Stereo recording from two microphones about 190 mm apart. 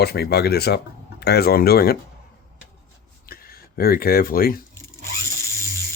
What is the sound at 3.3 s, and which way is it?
Speech, 50° left (ahead or behind).